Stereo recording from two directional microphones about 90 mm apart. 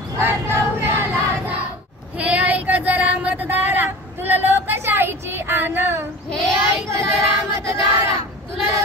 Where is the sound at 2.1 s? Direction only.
15° right (ahead or behind).